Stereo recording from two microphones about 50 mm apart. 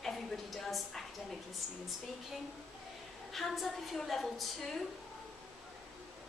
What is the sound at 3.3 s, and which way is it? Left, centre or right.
A woman's voice, centre.